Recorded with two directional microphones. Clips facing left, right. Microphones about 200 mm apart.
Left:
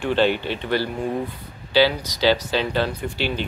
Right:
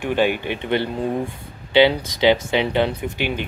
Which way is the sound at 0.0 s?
15° right (ahead or behind).